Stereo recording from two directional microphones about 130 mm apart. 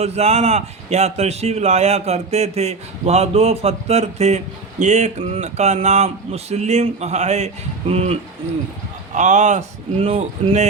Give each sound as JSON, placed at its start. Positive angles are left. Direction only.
{"t": 0.0, "sound": "speech", "side_deg": -55}
{"t": 9.1, "sound": "speech", "side_deg": -65}